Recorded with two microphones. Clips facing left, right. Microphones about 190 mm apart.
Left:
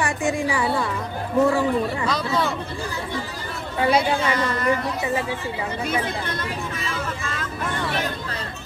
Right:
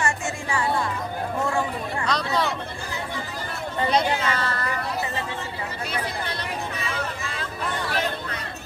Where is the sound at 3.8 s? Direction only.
10° left (ahead or behind).